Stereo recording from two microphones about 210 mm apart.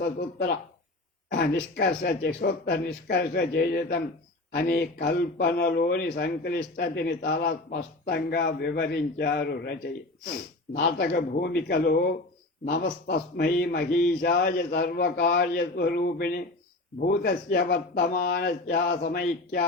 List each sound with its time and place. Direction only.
0.0 s a man's voice: 45° left (ahead or behind)
1.7 s a man's voice: 50° left (ahead or behind)